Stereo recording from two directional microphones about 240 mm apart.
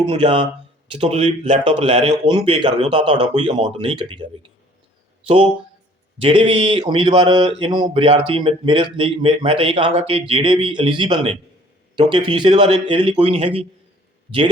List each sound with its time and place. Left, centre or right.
0.1 s speech: right
5.2 s speech: right